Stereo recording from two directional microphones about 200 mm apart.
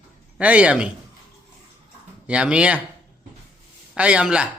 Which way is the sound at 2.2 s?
5° right (ahead or behind).